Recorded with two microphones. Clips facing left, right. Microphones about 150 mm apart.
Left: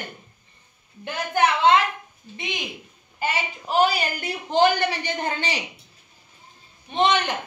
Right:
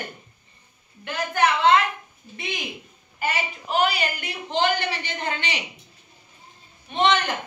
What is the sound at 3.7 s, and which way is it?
A woman's voice, 40° left (ahead or behind).